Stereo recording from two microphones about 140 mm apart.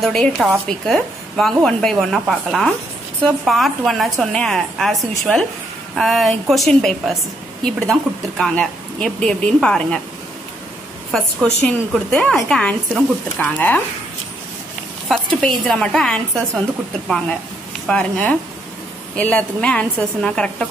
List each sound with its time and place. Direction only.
0.0 s speech: centre (ahead or behind)
5.9 s speech: centre (ahead or behind)
11.1 s a woman's voice: centre (ahead or behind)
15.0 s speech: 5° left (ahead or behind)
17.8 s a woman's voice: 10° left (ahead or behind)